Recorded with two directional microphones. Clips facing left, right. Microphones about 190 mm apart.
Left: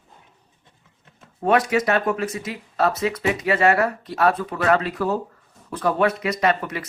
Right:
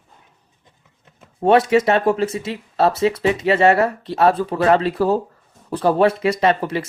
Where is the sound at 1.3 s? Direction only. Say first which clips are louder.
Right 5 dB; 30° right (ahead or behind).